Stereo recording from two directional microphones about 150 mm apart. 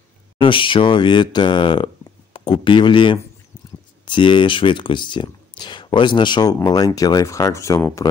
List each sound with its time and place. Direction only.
0.4 s speech: 35° left (ahead or behind)